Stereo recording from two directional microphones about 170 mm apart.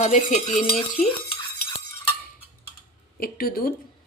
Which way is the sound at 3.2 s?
60° left (ahead or behind).